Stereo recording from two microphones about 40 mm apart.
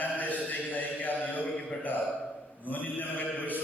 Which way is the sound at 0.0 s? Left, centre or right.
Left.